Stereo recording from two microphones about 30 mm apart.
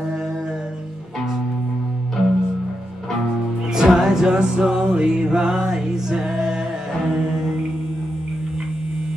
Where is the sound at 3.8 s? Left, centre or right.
Centre.